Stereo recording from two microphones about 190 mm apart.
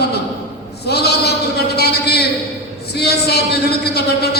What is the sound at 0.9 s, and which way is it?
Bleat, 60° left (ahead or behind).